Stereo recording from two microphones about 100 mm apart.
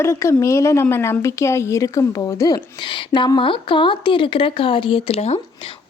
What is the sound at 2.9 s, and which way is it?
Speech, 55° left (ahead or behind).